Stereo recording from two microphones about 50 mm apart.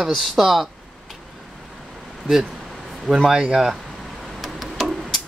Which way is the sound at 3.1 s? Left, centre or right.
Centre.